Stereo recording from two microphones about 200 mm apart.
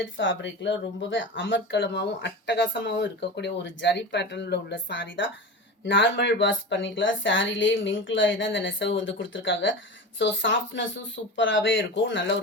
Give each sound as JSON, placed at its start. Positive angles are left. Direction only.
{"t": 0.2, "sound": "speech", "side_deg": 65}